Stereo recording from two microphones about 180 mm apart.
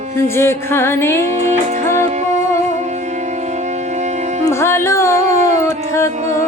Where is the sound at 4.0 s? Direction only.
40° right (ahead or behind).